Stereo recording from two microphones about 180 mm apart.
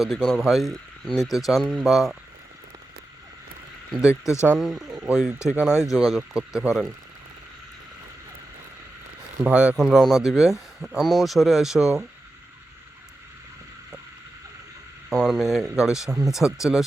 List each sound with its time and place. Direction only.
0.0 s speech: centre (ahead or behind)
4.1 s speech: 15° left (ahead or behind)
4.4 s speech: centre (ahead or behind)
9.4 s speech: 5° right (ahead or behind)
15.1 s speech: centre (ahead or behind)